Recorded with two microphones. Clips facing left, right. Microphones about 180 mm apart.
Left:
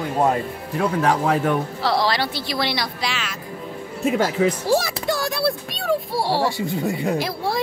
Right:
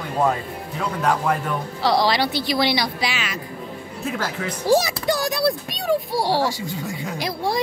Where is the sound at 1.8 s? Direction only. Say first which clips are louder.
Right 2 dB; centre (ahead or behind).